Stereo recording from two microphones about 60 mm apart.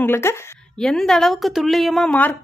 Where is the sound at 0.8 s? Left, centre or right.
Centre.